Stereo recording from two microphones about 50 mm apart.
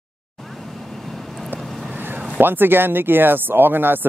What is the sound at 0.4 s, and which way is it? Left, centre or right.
Vehicle, centre.